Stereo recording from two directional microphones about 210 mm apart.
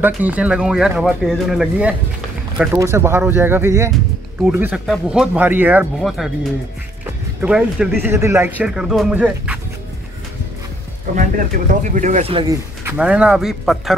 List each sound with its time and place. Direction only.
0.0 s speech: 5° right (ahead or behind)
7.4 s speech: 5° right (ahead or behind)
11.1 s speech: 40° right (ahead or behind)
12.8 s speech: 5° right (ahead or behind)